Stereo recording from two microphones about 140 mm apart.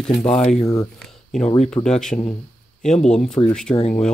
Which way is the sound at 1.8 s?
35° left (ahead or behind).